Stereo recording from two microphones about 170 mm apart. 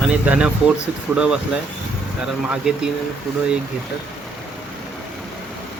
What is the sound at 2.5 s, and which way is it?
Speech, 5° right (ahead or behind).